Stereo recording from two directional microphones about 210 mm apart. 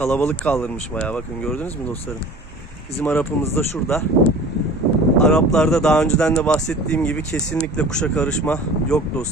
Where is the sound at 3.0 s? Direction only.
5° left (ahead or behind).